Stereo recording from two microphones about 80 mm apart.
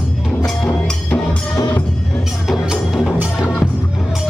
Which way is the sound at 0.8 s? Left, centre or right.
Centre.